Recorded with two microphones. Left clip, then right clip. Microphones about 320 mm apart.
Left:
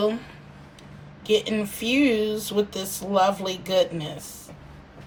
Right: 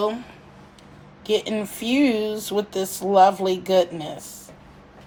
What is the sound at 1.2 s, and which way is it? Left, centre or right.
Speech, right.